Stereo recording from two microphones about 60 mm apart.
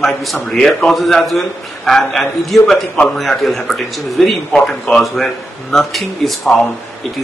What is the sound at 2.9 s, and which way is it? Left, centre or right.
Speech, centre.